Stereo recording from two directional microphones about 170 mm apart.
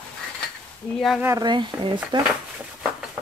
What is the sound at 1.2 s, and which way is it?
Speech, 20° right (ahead or behind).